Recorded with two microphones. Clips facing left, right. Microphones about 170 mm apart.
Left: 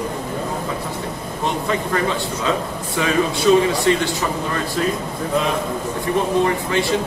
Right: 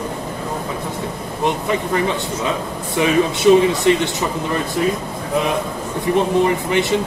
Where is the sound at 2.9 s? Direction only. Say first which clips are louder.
Right 3 dB; 20° right (ahead or behind).